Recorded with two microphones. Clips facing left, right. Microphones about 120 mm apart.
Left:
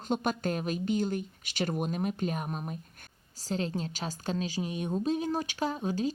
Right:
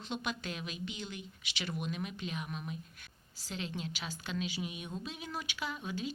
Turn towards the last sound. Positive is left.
turn(degrees=40)  # may be behind; listen again after turning